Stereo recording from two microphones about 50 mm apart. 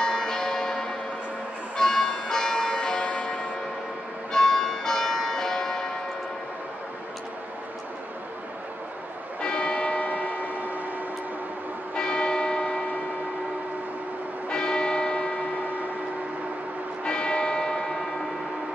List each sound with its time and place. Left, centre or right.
0.0 s church bell: centre
9.4 s church bell: centre
11.9 s church bell: centre
14.5 s music: centre
17.0 s church bell: centre